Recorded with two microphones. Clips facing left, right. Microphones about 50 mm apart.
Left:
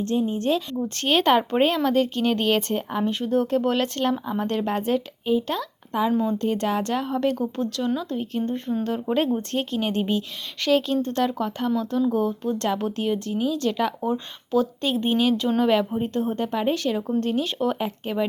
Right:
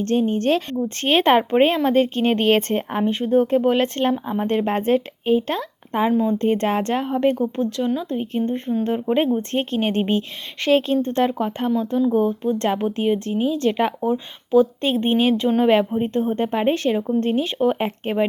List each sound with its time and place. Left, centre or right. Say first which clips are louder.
0.0 s speech: right 4 dB; right
1.0 s speech: right 3 dB; right
3.0 s speech: right 5 dB; right
14.0 s speech: right 4 dB; centre
14.8 s speech: right 3 dB; right
15.4 s speech: right 4 dB; centre
17.7 s speech: right 4 dB; right